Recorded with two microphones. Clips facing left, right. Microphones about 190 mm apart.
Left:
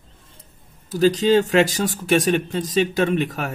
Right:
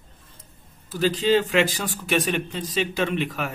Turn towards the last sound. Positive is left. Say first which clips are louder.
# left 4 dB
turn(degrees=45)  # may be behind; listen again after turning